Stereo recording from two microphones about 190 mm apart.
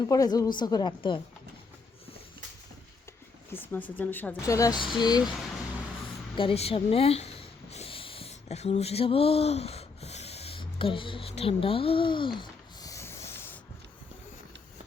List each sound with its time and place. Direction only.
0.1 s a woman's voice: 20° left (ahead or behind)
3.5 s a woman's voice: 10° left (ahead or behind)
6.3 s a sound: 30° left (ahead or behind); by 13.6 s 10° left (ahead or behind)